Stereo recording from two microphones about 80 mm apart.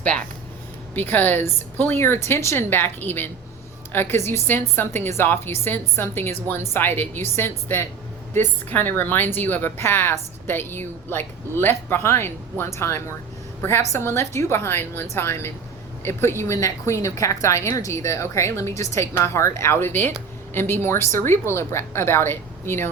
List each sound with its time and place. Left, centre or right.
0.9 s a woman's voice: left